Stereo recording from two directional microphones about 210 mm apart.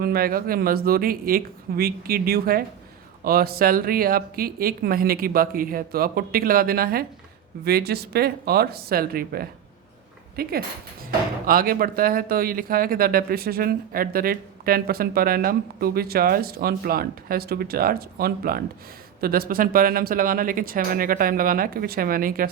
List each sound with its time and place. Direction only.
0.0 s speech: 45° right (ahead or behind)